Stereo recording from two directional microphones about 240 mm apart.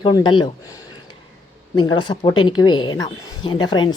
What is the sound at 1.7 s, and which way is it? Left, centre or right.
A woman's voice, centre.